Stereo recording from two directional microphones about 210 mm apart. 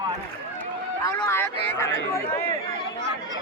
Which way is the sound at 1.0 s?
15° left (ahead or behind).